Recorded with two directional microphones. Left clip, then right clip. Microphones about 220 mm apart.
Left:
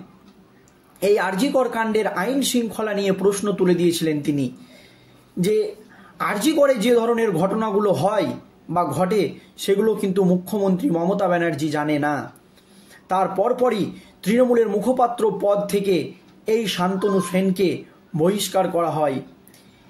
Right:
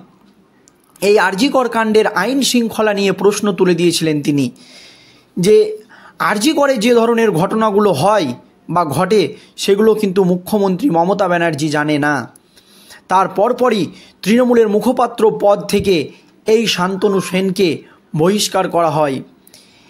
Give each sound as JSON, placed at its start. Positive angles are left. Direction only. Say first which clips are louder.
{"t": 0.9, "sound": "a man's voice", "louder": "right 7 dB", "side_deg": -45}